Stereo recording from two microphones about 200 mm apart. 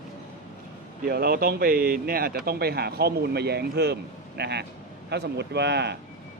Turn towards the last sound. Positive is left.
turn(degrees=-55)  # may be behind; listen again after turning